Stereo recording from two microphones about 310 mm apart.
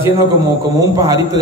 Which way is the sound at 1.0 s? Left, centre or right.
Centre.